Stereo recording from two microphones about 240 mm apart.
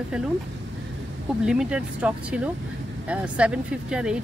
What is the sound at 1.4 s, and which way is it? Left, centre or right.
Speech, centre.